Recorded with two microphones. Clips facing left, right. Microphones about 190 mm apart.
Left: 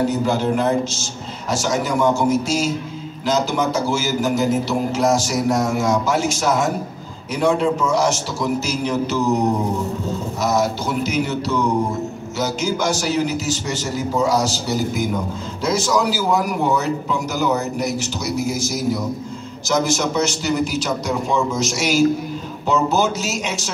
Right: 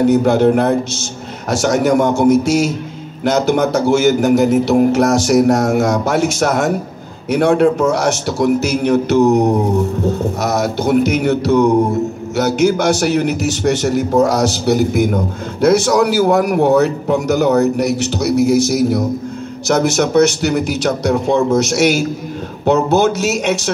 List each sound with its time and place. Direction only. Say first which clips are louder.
0.0 s a man's voice: right 8 dB; 65° right (ahead or behind)